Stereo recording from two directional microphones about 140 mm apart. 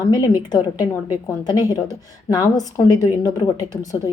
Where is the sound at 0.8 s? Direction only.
15° right (ahead or behind).